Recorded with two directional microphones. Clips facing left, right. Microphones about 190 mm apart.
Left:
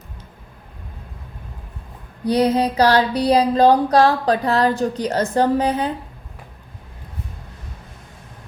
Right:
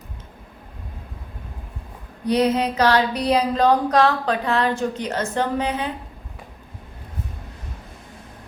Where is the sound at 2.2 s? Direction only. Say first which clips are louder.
Left 2 dB; 35° left (ahead or behind).